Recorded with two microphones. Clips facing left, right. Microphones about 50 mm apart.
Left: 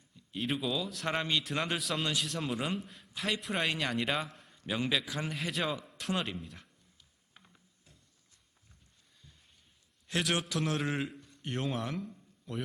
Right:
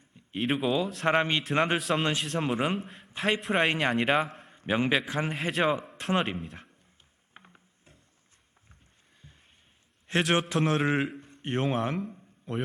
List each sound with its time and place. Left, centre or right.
0.3 s speech: right
0.6 s a man's voice: right
5.4 s a man's voice: right
7.3 s a sound: right
10.1 s a man's voice: right